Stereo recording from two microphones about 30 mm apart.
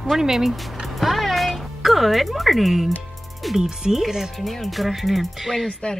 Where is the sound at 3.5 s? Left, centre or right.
Centre.